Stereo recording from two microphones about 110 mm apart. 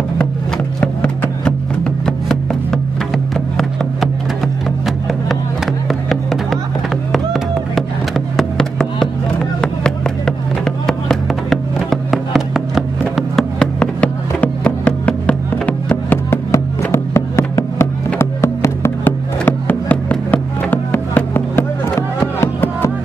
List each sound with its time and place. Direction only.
0.7 s music: 10° left (ahead or behind)
7.1 s music: centre (ahead or behind)
9.6 s a sound: 5° left (ahead or behind)
22.2 s music: 20° left (ahead or behind)